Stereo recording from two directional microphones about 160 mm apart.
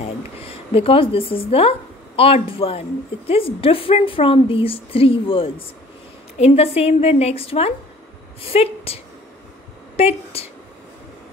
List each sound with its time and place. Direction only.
0.0 s a woman's voice: 35° left (ahead or behind)